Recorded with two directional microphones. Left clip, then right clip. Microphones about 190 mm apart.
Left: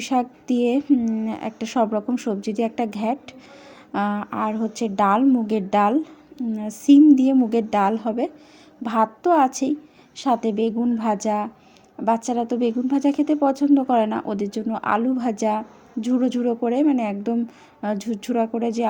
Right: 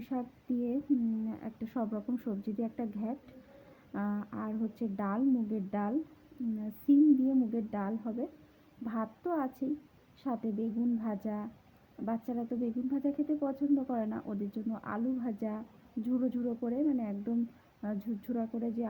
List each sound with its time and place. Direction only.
0.1 s a woman's voice: 20° left (ahead or behind)
2.1 s a woman's voice: 5° left (ahead or behind)
2.6 s a woman's voice: 20° left (ahead or behind)